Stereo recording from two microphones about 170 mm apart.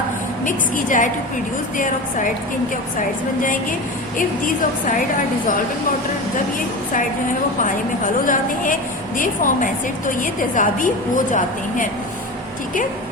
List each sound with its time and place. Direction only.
0.4 s a woman's voice: 50° left (ahead or behind)
8.2 s a woman's voice: 50° left (ahead or behind)